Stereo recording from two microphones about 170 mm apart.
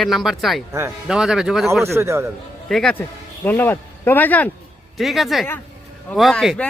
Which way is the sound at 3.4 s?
10° left (ahead or behind).